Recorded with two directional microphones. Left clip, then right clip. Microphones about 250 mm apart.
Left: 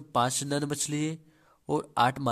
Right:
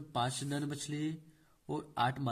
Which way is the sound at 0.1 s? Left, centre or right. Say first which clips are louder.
Left 9 dB; left.